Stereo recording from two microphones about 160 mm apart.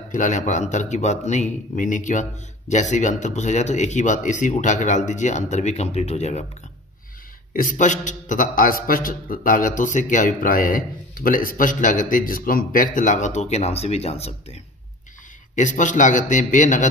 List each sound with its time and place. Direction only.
0.1 s speech: 50° left (ahead or behind)
7.5 s a man's voice: 55° left (ahead or behind)